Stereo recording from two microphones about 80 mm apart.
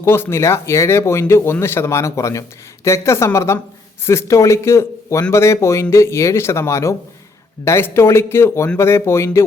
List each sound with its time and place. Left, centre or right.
0.0 s speech: left